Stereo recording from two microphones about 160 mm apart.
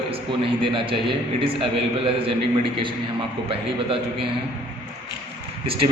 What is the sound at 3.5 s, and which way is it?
Speech, 35° right (ahead or behind).